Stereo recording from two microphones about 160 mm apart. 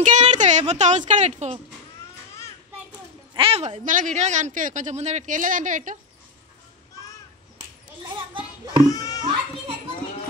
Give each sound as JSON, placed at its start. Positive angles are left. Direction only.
{"t": 0.0, "sound": "speech", "side_deg": -50}
{"t": 3.3, "sound": "a woman's voice", "side_deg": -40}
{"t": 3.8, "sound": "speech", "side_deg": -50}
{"t": 8.8, "sound": "a child's voice", "side_deg": 25}